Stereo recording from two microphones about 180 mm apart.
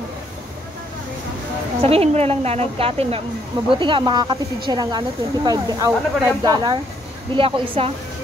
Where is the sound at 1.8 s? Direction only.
35° right (ahead or behind).